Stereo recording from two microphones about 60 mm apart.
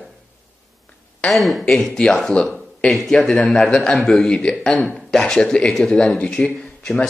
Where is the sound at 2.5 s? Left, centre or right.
Centre.